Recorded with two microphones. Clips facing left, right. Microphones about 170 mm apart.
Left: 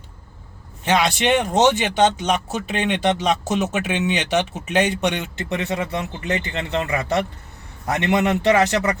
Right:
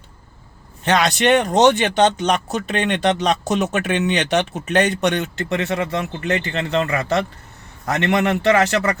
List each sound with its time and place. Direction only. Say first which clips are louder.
0.9 s speech: right 2 dB; 10° left (ahead or behind)